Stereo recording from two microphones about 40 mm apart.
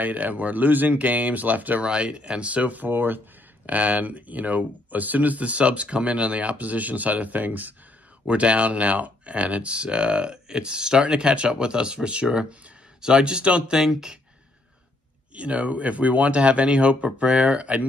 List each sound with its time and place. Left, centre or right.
0.0 s speech: right
1.8 s speech: right
2.9 s speech: right
3.6 s speech: right
8.3 s speech: right
13.7 s speech: centre
15.3 s speech: right